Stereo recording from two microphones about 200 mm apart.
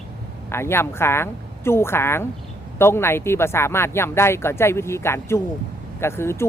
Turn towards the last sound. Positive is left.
turn(degrees=10)  # may be behind; listen again after turning